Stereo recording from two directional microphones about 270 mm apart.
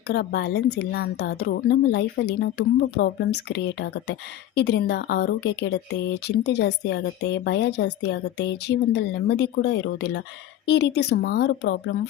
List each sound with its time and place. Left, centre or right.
0.1 s speech: left